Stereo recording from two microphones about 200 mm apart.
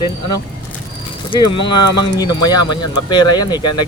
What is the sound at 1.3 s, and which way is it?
Speech, 25° left (ahead or behind).